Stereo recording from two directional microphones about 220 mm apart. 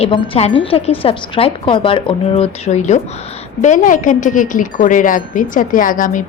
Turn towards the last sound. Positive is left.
turn(degrees=35)  # may be behind; listen again after turning